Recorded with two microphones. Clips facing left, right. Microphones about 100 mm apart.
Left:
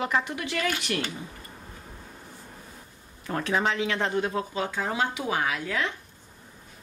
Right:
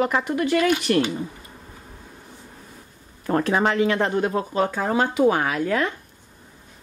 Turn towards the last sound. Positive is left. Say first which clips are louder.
# right 6 dB
turn(degrees=-45)  # may be behind; listen again after turning